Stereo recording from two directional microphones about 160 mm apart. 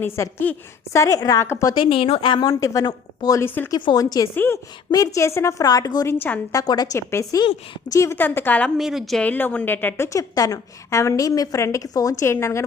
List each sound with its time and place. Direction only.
0.0 s a woman's voice: 15° left (ahead or behind)
1.7 s a woman's voice: 30° left (ahead or behind); by 3.8 s 15° left (ahead or behind)
3.8 s a woman's voice: 25° left (ahead or behind); by 6.6 s 10° left (ahead or behind)
6.6 s a woman's voice: 25° left (ahead or behind)
8.8 s a woman's voice: centre (ahead or behind); by 12.6 s 15° left (ahead or behind)